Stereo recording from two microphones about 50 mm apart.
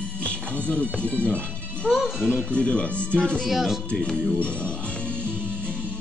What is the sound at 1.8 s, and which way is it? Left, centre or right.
Speech, centre.